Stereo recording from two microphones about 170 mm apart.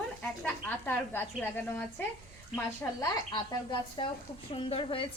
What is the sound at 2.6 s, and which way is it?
Speech, 15° left (ahead or behind).